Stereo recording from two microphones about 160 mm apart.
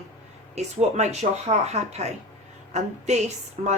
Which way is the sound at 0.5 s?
45° right (ahead or behind).